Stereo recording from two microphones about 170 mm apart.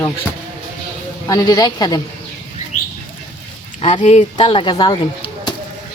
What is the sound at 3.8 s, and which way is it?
Speech, 40° left (ahead or behind).